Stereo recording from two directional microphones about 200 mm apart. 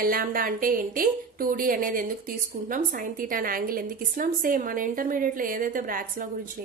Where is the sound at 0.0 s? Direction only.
45° right (ahead or behind).